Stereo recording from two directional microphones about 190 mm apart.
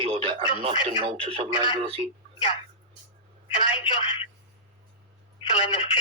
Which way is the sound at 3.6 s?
30° left (ahead or behind).